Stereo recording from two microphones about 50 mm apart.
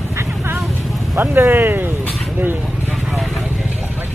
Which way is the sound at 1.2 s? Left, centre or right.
Right.